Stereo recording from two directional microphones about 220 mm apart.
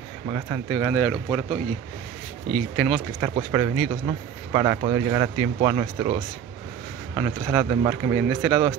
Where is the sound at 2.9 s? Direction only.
15° right (ahead or behind).